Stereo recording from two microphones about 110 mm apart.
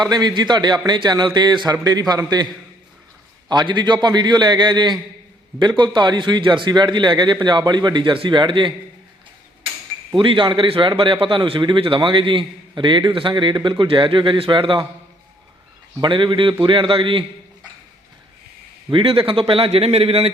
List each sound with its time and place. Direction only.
0.0 s a man's voice: 40° right (ahead or behind)
3.5 s a man's voice: 45° right (ahead or behind)
10.2 s a man's voice: 45° right (ahead or behind)
16.0 s a man's voice: 45° right (ahead or behind)
18.9 s a man's voice: 55° right (ahead or behind)